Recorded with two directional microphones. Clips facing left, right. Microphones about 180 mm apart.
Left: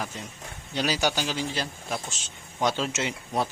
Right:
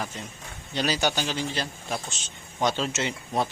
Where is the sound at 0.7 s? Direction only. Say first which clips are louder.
Even; 10° left (ahead or behind).